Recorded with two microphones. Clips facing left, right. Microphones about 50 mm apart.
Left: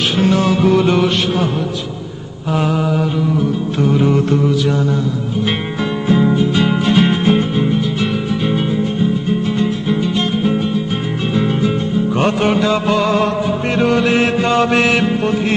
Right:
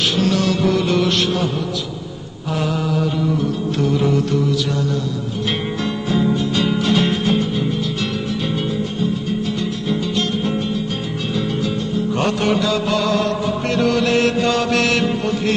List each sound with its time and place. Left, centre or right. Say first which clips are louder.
0.2 s music: left 6 dB; left
3.8 s music: left 4 dB; left
5.5 s music: left 3 dB; left
9.6 s music: left 5 dB; left